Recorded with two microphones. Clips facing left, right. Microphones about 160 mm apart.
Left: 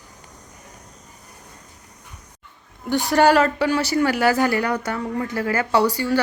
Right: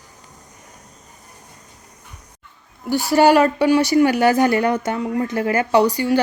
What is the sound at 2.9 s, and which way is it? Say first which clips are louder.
A woman's voice: right 2 dB; 5° right (ahead or behind).